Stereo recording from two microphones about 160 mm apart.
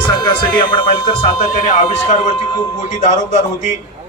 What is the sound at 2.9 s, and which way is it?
Speech, 45° left (ahead or behind).